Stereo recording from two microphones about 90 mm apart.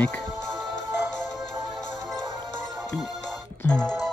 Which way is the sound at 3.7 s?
10° left (ahead or behind).